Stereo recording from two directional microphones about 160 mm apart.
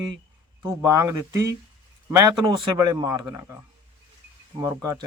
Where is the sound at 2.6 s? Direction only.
25° right (ahead or behind).